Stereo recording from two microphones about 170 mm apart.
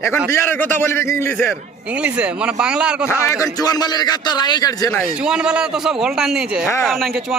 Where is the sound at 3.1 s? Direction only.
15° left (ahead or behind).